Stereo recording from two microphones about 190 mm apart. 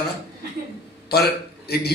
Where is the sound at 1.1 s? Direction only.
55° left (ahead or behind).